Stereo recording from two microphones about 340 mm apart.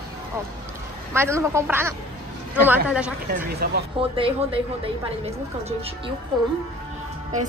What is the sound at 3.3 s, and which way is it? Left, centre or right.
Speech, right.